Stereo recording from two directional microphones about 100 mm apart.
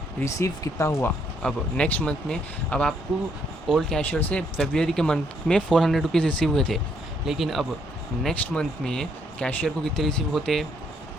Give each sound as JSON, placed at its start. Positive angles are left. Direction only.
{"t": 0.3, "sound": "speech", "side_deg": 30}
{"t": 1.4, "sound": "speech", "side_deg": 10}